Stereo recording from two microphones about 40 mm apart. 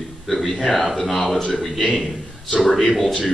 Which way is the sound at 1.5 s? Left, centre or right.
Centre.